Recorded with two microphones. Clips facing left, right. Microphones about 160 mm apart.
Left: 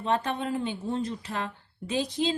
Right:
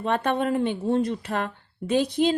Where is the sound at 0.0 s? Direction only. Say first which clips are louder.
Right 4 dB; 60° right (ahead or behind).